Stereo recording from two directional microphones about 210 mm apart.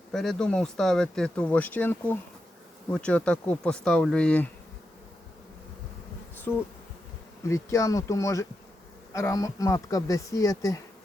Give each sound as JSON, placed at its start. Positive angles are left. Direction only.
{"t": 0.1, "sound": "speech", "side_deg": 5}
{"t": 6.5, "sound": "speech", "side_deg": 10}